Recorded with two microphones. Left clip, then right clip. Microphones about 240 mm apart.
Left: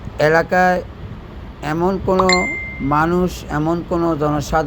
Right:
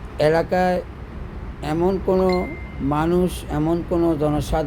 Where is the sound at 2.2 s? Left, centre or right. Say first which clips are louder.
Left 5 dB; left.